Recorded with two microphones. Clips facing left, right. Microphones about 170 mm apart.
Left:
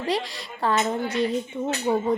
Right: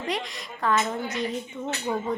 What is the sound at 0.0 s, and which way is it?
Speech, 30° left (ahead or behind).